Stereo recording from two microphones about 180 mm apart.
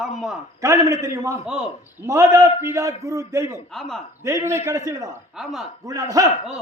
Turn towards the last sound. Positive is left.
turn(degrees=-20)  # may be behind; listen again after turning